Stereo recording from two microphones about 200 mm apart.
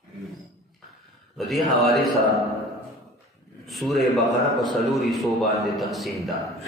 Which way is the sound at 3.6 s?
Centre (ahead or behind).